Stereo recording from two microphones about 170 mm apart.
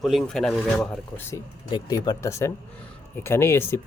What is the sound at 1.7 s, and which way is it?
Speech, 25° left (ahead or behind).